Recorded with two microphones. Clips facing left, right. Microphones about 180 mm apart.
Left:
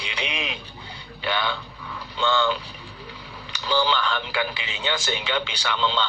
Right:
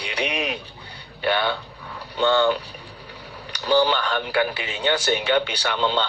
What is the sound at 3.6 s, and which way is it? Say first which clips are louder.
Speech: right 4 dB; 45° right (ahead or behind).